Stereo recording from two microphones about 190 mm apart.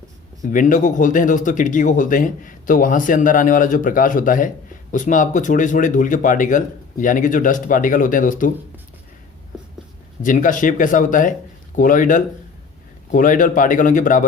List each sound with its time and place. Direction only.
0.5 s speech: 45° left (ahead or behind)
10.2 s speech: 45° left (ahead or behind)